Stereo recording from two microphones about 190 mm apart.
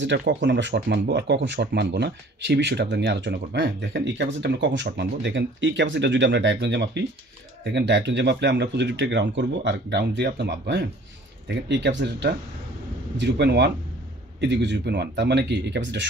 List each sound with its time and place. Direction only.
0.0 s speech: 65° right (ahead or behind)